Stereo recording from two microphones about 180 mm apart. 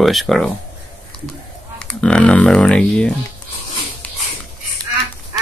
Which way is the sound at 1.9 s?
5° left (ahead or behind).